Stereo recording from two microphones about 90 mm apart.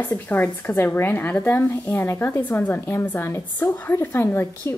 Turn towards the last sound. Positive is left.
turn(degrees=25)  # may be behind; listen again after turning